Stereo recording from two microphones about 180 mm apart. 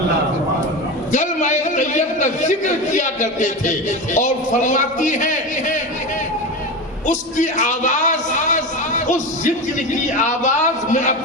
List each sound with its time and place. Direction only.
1.1 s a man's voice: 45° left (ahead or behind)
7.1 s a sound: 45° left (ahead or behind)
9.9 s a man's voice: 45° left (ahead or behind)